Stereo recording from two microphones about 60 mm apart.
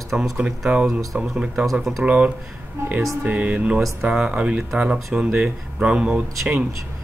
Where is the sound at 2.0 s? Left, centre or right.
Centre.